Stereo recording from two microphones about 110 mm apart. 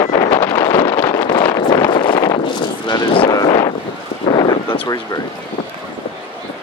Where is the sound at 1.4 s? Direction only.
35° left (ahead or behind).